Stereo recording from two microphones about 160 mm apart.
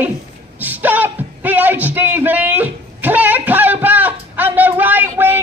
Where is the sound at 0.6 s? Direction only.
10° right (ahead or behind).